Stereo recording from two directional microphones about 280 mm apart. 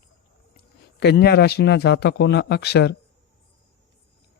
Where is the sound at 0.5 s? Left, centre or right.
Left.